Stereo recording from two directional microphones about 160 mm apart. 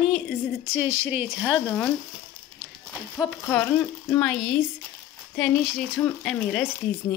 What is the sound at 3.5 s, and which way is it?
Speech, 15° left (ahead or behind).